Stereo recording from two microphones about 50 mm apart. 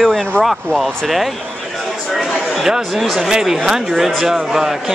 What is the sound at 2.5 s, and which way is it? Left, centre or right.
A man's voice, centre.